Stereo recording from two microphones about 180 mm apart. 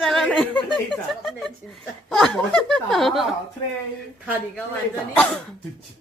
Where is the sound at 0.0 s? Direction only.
Centre (ahead or behind).